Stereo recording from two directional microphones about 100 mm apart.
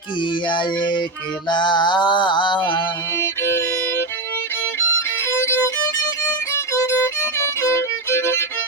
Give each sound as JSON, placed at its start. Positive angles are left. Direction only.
{"t": 0.4, "sound": "mantra", "side_deg": 50}
{"t": 3.2, "sound": "violin", "side_deg": 25}
{"t": 5.3, "sound": "violin", "side_deg": 25}